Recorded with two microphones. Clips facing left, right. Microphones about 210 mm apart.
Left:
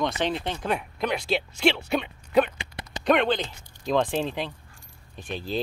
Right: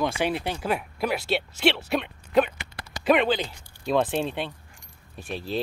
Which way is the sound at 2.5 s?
20° left (ahead or behind).